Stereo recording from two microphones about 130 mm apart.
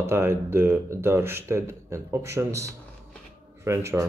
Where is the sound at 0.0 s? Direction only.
20° right (ahead or behind).